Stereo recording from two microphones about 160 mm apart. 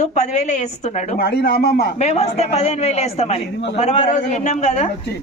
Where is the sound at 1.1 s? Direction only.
75° left (ahead or behind).